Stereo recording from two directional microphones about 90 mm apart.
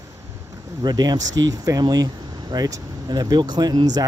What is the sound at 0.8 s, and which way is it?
Speech, 45° right (ahead or behind).